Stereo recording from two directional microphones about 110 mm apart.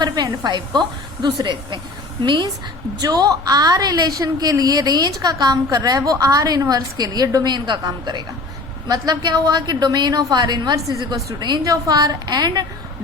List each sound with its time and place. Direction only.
0.0 s a woman's voice: 40° right (ahead or behind)